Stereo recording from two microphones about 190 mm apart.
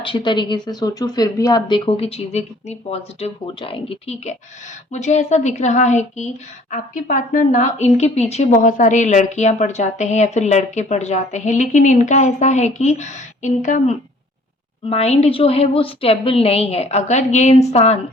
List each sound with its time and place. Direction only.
0.0 s a woman's voice: 25° left (ahead or behind)